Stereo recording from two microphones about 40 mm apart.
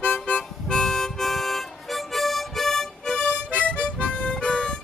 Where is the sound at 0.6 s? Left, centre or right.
Centre.